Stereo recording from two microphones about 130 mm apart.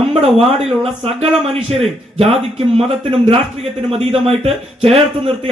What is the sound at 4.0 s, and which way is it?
Speech, 50° right (ahead or behind).